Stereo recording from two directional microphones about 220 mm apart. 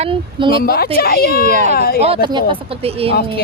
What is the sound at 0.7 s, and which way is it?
Speech, 45° left (ahead or behind).